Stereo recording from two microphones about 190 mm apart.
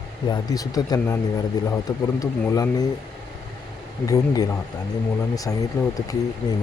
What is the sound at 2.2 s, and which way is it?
Speech, 20° left (ahead or behind).